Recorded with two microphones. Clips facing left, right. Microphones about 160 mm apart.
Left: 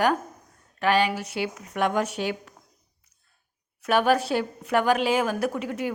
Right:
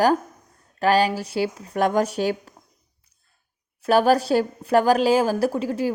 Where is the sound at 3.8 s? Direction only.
35° right (ahead or behind).